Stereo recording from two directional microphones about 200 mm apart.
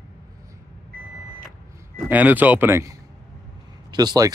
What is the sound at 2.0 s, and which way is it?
Speech, 10° right (ahead or behind).